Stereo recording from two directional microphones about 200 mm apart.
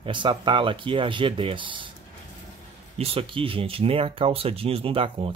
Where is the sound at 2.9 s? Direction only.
30° right (ahead or behind).